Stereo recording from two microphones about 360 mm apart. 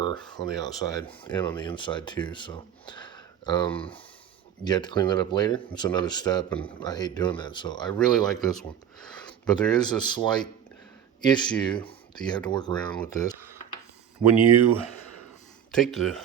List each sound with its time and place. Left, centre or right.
0.0 s speech: centre
14.5 s speech: right
15.7 s speech: centre